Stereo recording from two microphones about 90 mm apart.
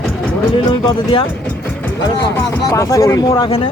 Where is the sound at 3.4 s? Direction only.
85° left.